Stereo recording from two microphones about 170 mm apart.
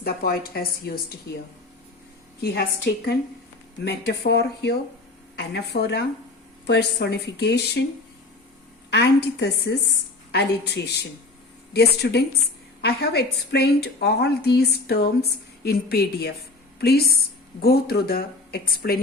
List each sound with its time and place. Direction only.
0.0 s speech: 65° left (ahead or behind)
2.4 s a woman's voice: 70° left (ahead or behind)
8.9 s a woman's voice: 80° left